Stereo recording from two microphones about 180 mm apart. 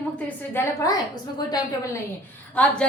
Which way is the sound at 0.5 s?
15° left (ahead or behind).